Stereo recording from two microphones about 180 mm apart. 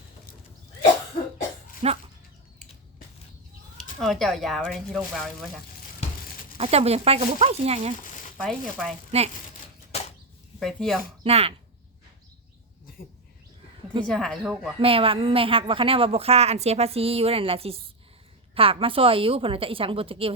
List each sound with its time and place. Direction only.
1.8 s a woman's voice: 35° right (ahead or behind)
4.0 s speech: centre (ahead or behind)
6.6 s a woman's voice: 35° right (ahead or behind)
8.4 s speech: centre (ahead or behind)
10.6 s speech: centre (ahead or behind)
11.2 s speech: 35° right (ahead or behind)
14.0 s speech: 5° left (ahead or behind)
14.8 s a woman's voice: 30° right (ahead or behind)